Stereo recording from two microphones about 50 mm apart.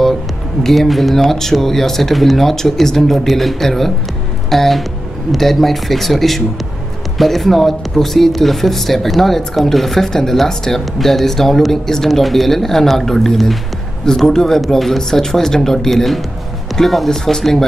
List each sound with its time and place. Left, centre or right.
0.7 s speech: centre